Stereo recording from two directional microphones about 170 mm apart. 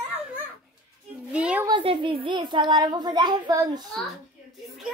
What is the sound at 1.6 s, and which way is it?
A child's voice, 30° right (ahead or behind).